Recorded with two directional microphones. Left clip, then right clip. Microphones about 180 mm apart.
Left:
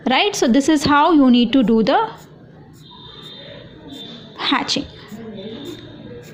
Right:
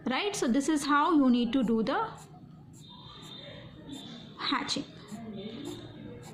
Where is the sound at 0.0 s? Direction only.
35° left (ahead or behind).